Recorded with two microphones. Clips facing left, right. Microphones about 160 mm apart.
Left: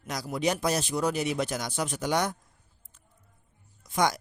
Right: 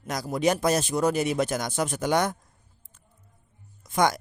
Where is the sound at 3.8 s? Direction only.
50° right (ahead or behind).